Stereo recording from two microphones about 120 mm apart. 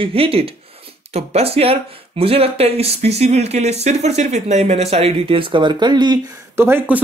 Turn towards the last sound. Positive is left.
turn(degrees=-20)  # may be behind; listen again after turning